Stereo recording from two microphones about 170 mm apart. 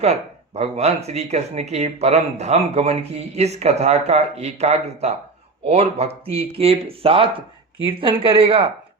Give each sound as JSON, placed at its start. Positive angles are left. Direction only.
{"t": 0.0, "sound": "speech", "side_deg": -40}